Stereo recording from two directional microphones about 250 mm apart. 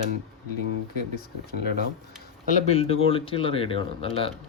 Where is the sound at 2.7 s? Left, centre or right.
Left.